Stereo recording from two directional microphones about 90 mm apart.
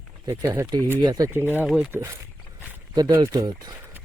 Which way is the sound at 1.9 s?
25° right (ahead or behind).